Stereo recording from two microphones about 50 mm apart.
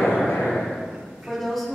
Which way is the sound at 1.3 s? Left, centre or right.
Centre.